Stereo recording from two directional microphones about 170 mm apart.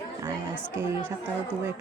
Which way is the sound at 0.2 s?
15° right (ahead or behind).